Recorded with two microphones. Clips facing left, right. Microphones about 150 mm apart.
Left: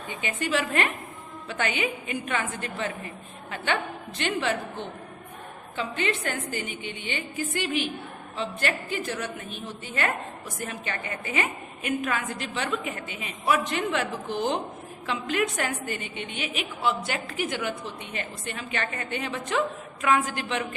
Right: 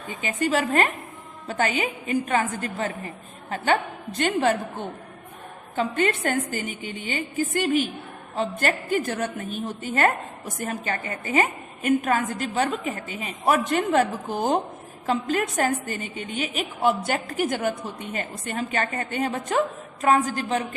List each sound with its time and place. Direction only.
0.1 s a woman's voice: 40° right (ahead or behind)